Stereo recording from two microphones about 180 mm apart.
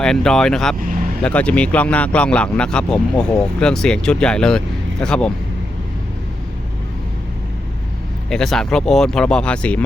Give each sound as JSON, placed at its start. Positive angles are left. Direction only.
{"t": 0.0, "sound": "speech", "side_deg": 5}
{"t": 0.9, "sound": "vehicle", "side_deg": -50}
{"t": 1.2, "sound": "speech", "side_deg": 5}
{"t": 8.3, "sound": "speech", "side_deg": 5}